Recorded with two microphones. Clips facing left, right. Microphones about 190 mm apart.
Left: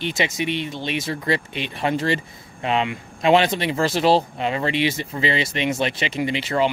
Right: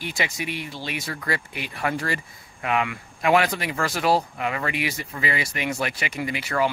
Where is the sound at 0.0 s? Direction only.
25° left (ahead or behind).